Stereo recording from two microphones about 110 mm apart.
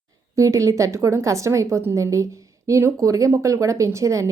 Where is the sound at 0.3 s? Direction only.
30° right (ahead or behind).